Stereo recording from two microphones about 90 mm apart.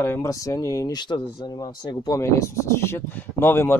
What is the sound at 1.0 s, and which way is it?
Speech, 60° left (ahead or behind).